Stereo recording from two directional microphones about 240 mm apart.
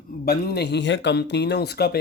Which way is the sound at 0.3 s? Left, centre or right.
Left.